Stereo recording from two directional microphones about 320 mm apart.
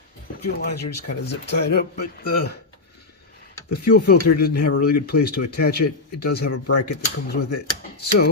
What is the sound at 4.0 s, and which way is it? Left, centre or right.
Speech, left.